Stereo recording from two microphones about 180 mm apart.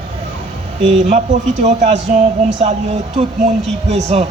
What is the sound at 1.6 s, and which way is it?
A man's voice, 40° right (ahead or behind).